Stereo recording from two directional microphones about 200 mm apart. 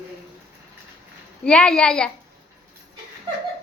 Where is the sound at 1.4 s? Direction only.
5° left (ahead or behind).